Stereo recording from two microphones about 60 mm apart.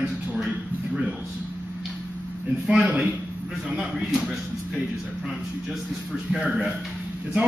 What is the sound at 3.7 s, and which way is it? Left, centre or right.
Speech, centre.